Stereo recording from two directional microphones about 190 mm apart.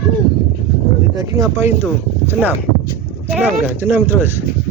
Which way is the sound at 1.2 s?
15° right (ahead or behind).